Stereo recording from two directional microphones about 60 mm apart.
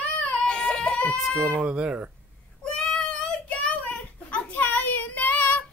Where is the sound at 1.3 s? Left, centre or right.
Centre.